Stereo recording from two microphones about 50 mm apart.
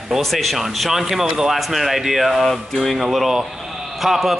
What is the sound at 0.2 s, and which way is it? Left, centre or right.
A man's voice, centre.